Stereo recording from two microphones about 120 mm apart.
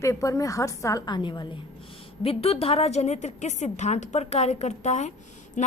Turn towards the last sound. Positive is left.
turn(degrees=90)